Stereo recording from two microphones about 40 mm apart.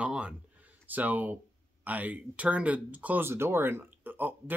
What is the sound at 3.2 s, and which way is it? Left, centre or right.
Speech, right.